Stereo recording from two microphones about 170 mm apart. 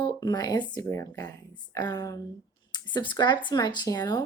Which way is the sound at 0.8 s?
15° left (ahead or behind).